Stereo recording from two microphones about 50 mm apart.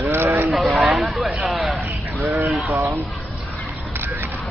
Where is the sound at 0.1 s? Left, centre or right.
Right.